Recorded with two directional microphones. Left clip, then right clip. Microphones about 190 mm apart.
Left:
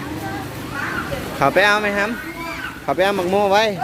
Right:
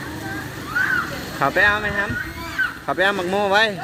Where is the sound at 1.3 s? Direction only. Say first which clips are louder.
Left 2 dB; 15° left (ahead or behind).